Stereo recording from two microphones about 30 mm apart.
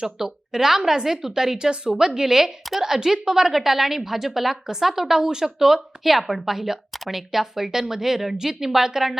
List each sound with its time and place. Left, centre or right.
0.2 s a woman's voice: centre
1.5 s a woman's voice: right; by 5.2 s centre
5.2 s speech: right
5.5 s a woman's voice: centre